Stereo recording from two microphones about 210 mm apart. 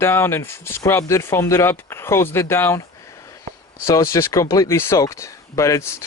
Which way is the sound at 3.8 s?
15° left (ahead or behind).